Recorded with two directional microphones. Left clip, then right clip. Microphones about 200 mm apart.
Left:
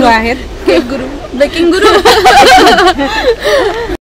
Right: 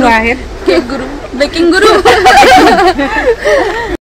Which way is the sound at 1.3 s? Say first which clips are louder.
Even; 15° left (ahead or behind).